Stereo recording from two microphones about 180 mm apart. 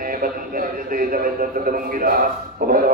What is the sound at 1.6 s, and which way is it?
Speech, 50° right (ahead or behind).